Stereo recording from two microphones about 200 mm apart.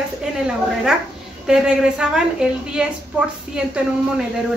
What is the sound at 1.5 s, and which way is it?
A woman's voice, 5° right (ahead or behind).